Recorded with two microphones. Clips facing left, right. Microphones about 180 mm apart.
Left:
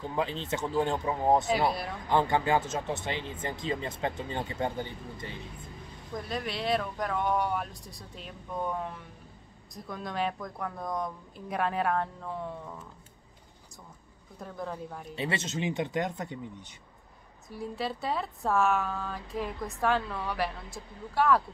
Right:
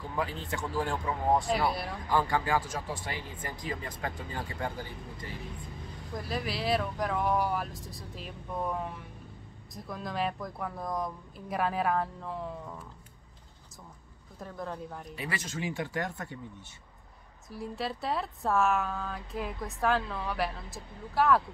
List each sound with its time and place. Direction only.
0.0 s speech: 20° left (ahead or behind)
1.5 s a woman's voice: centre (ahead or behind)
2.0 s speech: 20° left (ahead or behind)
6.1 s a woman's voice: centre (ahead or behind)
14.4 s a woman's voice: centre (ahead or behind)
15.1 s speech: 25° left (ahead or behind)
17.5 s a woman's voice: centre (ahead or behind)